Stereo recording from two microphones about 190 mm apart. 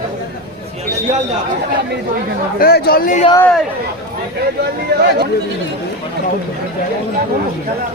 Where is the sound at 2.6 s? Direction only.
55° left (ahead or behind).